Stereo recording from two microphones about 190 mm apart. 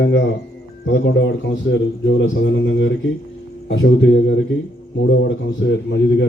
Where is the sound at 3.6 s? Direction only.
80° left.